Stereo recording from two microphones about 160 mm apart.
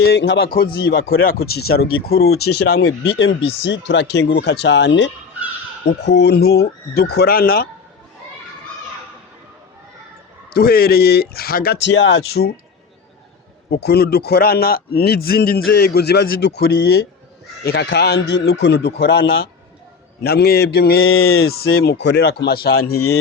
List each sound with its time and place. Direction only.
0.0 s a man's voice: 90° left
3.0 s speech: 35° left (ahead or behind)
4.3 s a man's voice: 90° left; by 7.7 s 70° left (ahead or behind)
10.5 s a man's voice: 75° left (ahead or behind)
13.7 s a man's voice: 90° left
20.2 s speech: 80° left